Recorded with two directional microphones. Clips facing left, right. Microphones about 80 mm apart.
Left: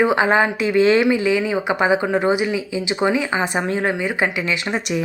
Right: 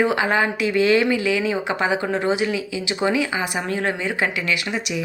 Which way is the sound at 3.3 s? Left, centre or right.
Left.